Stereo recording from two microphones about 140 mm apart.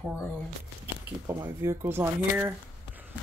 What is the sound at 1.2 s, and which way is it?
Speech, 25° right (ahead or behind).